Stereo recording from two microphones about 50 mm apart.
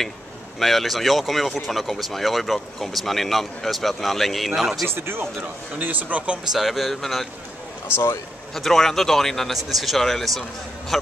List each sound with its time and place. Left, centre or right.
0.6 s speech: centre
4.8 s speech: right
5.4 s speech: right
6.5 s speech: centre
8.5 s speech: centre